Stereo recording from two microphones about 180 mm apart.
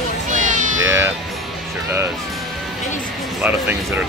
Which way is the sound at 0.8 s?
15° right (ahead or behind).